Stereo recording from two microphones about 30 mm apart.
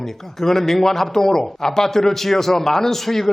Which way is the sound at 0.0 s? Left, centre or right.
Centre.